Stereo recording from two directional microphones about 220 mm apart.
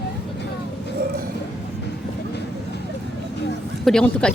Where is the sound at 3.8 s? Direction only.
Centre (ahead or behind).